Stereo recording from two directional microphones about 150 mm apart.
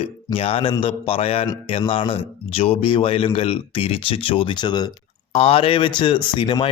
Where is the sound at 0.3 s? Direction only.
40° left (ahead or behind).